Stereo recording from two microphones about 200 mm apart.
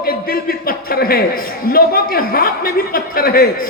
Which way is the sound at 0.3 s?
45° left (ahead or behind).